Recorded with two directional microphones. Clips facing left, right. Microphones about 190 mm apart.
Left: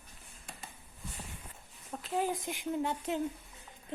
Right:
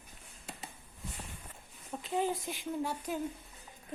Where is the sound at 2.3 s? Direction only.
20° left (ahead or behind).